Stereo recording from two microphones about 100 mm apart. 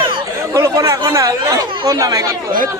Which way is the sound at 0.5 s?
30° right (ahead or behind).